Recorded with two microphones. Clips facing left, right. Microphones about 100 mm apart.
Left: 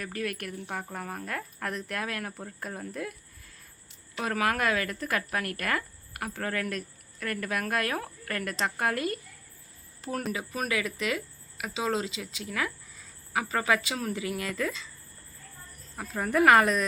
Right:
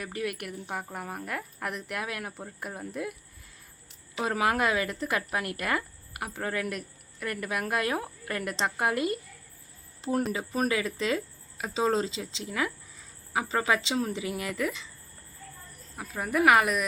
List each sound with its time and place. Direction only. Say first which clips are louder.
0.0 s speech: even; 15° right (ahead or behind)
4.2 s a woman's voice: right 1 dB; 20° right (ahead or behind)
16.0 s speech: left 2 dB; 10° right (ahead or behind)